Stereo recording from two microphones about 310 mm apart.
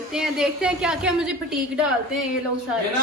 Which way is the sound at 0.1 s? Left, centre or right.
Centre.